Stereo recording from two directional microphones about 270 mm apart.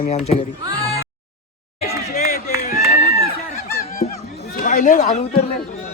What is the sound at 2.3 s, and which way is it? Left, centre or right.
Run, left.